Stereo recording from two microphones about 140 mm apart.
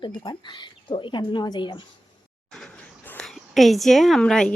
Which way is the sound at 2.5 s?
5° left (ahead or behind).